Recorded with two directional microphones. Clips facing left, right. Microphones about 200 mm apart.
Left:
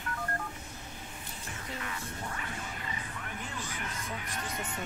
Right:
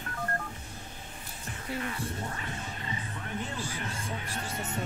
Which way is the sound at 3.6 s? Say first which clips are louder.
Right 3 dB; 30° right (ahead or behind).